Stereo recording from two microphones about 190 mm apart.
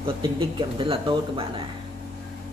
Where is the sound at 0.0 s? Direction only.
25° right (ahead or behind).